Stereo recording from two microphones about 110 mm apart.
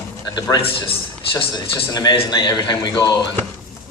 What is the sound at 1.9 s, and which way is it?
A man's voice, 40° left (ahead or behind).